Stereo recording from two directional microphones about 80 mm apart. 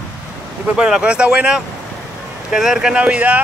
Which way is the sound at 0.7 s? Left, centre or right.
Centre.